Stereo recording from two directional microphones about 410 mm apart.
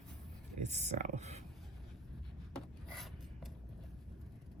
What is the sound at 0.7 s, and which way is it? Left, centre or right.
Speech, centre.